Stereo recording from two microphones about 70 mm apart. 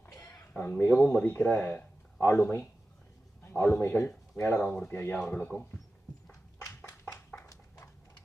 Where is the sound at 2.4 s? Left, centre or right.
Left.